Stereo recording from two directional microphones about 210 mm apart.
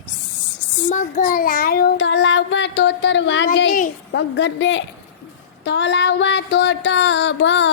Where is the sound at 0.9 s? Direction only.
35° left (ahead or behind).